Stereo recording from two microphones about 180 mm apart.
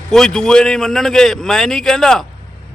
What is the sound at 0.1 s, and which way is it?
A man's voice, 5° left (ahead or behind).